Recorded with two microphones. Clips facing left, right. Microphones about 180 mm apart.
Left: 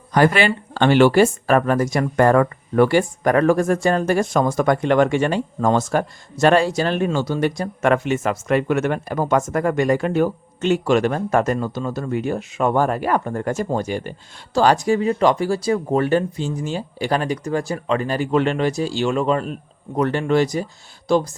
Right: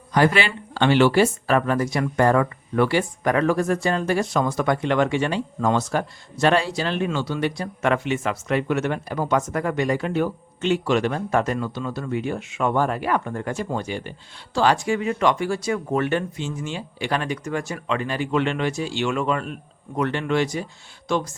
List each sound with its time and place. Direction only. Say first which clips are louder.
0.1 s speech: left 3 dB; 50° left (ahead or behind)